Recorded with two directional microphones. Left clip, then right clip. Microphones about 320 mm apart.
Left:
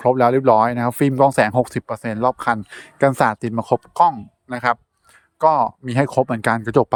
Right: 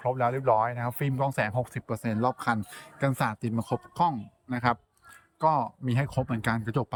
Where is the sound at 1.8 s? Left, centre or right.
Centre.